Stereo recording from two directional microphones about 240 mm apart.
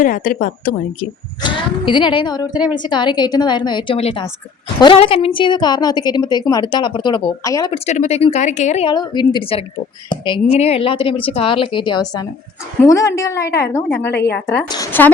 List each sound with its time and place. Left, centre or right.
0.0 s a woman's voice: left
1.4 s a woman's voice: centre
7.9 s a woman's voice: left; by 15.1 s centre